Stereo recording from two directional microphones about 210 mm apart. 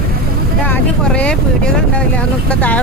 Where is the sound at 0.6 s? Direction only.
5° left (ahead or behind).